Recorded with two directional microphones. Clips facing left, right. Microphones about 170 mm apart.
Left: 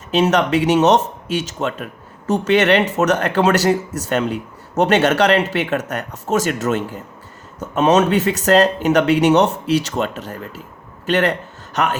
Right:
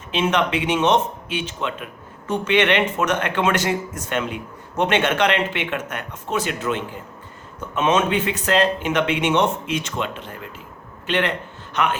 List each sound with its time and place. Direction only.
0.1 s a man's voice: 40° left (ahead or behind)